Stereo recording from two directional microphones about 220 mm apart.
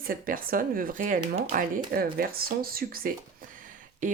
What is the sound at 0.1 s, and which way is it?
Speech, 40° right (ahead or behind).